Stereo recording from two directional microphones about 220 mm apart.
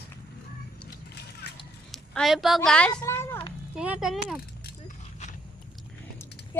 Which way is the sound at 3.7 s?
5° right (ahead or behind).